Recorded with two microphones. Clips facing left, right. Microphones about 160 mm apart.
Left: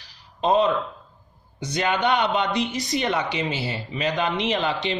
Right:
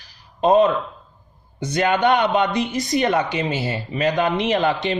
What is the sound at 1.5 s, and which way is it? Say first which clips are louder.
Speech: right 5 dB; 55° right (ahead or behind).